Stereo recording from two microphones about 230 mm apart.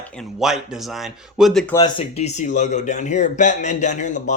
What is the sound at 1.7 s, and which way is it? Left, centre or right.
Speech, left.